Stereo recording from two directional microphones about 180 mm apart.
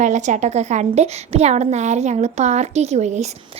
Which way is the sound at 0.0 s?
40° right (ahead or behind).